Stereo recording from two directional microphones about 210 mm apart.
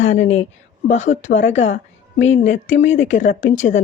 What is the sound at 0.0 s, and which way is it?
A woman's voice, 35° left (ahead or behind).